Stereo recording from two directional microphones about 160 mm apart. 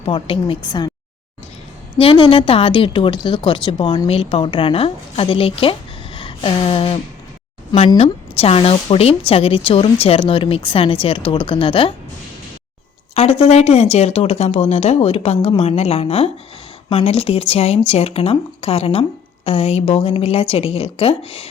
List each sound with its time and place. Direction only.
0.0 s a woman's voice: 35° left (ahead or behind)
2.0 s a woman's voice: 35° left (ahead or behind)
6.1 s a sound: 35° left (ahead or behind)
7.7 s a woman's voice: 35° left (ahead or behind)
13.1 s a woman's voice: 40° left (ahead or behind)